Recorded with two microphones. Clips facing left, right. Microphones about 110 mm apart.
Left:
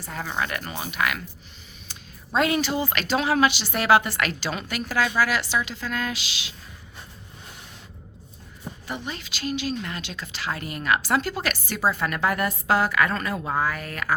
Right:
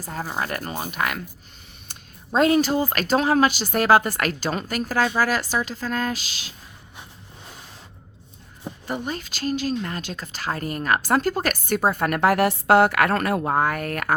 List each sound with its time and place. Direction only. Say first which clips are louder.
0.0 s a woman's voice: right 1 dB; 40° right (ahead or behind)
8.9 s a woman's voice: right 5 dB; 45° right (ahead or behind)